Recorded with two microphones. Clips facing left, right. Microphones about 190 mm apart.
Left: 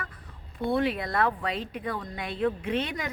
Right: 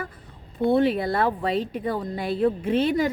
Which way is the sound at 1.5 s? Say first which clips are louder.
Right 8 dB; centre (ahead or behind).